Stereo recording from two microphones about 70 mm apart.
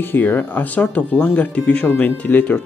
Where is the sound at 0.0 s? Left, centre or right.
Left.